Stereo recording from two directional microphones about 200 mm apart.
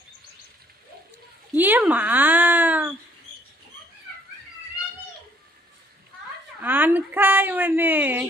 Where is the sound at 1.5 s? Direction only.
10° right (ahead or behind).